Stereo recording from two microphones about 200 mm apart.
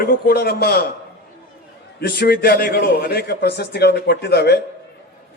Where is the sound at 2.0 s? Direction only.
50° left (ahead or behind).